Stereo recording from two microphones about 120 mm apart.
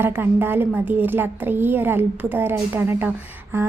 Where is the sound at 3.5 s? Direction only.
20° right (ahead or behind).